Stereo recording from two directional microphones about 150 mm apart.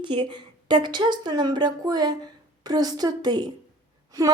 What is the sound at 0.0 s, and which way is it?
A woman's voice, 30° right (ahead or behind).